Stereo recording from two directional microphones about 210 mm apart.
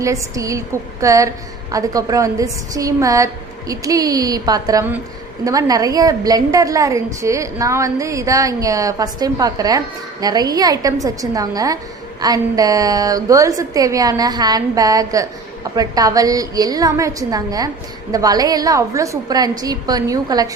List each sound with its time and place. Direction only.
0.0 s a woman's voice: 15° right (ahead or behind)